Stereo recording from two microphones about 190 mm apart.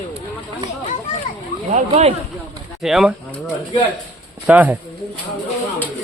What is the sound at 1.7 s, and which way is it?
Speech, 35° right (ahead or behind).